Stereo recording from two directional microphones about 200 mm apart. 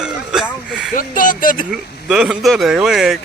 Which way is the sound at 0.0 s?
Centre (ahead or behind).